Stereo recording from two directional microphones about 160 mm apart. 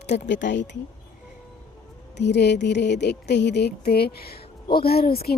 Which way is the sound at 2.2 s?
90° left.